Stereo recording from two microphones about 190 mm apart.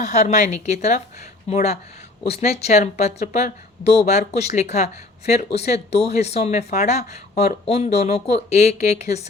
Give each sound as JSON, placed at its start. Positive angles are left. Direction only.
{"t": 0.0, "sound": "speech", "side_deg": 35}